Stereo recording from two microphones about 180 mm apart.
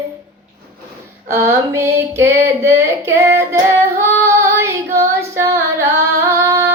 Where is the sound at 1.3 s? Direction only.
15° right (ahead or behind).